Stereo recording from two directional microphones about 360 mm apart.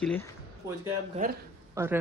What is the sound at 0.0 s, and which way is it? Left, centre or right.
Speech, centre.